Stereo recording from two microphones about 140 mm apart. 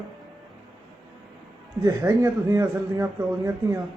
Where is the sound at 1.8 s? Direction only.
20° right (ahead or behind).